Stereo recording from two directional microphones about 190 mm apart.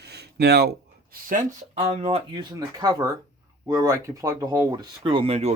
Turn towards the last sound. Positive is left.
turn(degrees=-35)  # may be behind; listen again after turning